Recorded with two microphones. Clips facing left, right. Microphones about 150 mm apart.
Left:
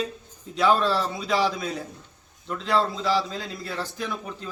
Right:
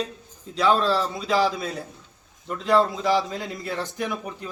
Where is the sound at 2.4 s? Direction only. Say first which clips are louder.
Right 4 dB; 10° right (ahead or behind).